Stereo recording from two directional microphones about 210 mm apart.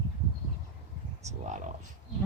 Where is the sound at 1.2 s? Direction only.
35° right (ahead or behind).